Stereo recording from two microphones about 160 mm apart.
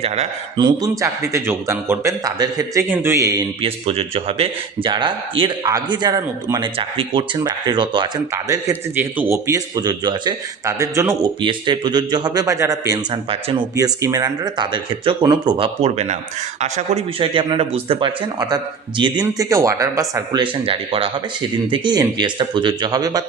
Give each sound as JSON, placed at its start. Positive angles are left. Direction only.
{"t": 0.5, "sound": "a man's voice", "side_deg": -25}
{"t": 3.6, "sound": "a man's voice", "side_deg": -35}
{"t": 8.3, "sound": "a man's voice", "side_deg": -15}
{"t": 11.4, "sound": "a man's voice", "side_deg": -30}
{"t": 13.3, "sound": "speech", "side_deg": -35}
{"t": 13.7, "sound": "a man's voice", "side_deg": -20}
{"t": 19.2, "sound": "a man's voice", "side_deg": -20}
{"t": 20.4, "sound": "a man's voice", "side_deg": -35}